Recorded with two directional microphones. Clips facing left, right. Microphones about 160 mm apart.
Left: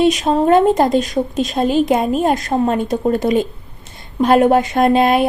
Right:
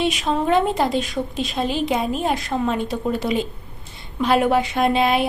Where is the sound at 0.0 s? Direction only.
45° left (ahead or behind).